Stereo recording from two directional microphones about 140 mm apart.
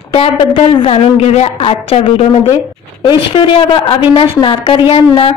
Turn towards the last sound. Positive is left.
turn(degrees=40)  # may be behind; listen again after turning